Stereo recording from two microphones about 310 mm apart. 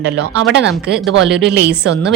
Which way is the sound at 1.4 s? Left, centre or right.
Right.